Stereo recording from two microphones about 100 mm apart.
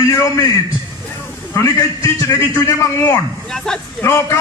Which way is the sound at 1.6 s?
30° left (ahead or behind).